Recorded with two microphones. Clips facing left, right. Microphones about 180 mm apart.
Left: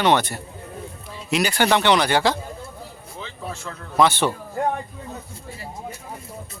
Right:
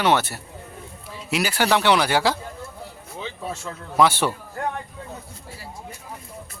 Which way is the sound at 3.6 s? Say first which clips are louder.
Even; 10° right (ahead or behind).